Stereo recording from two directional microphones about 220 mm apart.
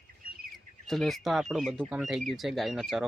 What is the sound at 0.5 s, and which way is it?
Speech, centre (ahead or behind).